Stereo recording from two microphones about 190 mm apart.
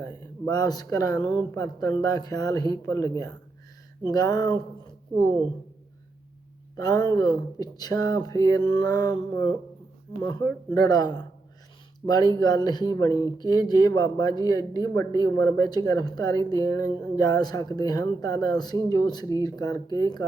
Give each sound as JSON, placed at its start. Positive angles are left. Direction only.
{"t": 0.5, "sound": "speech", "side_deg": 20}
{"t": 6.7, "sound": "speech", "side_deg": 20}